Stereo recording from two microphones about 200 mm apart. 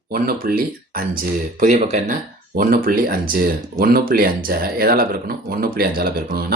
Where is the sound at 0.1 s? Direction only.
45° right (ahead or behind).